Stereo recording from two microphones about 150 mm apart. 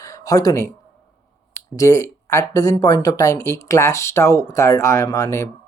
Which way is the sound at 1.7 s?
20° left (ahead or behind).